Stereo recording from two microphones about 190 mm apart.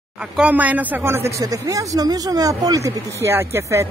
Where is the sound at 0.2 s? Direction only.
5° right (ahead or behind).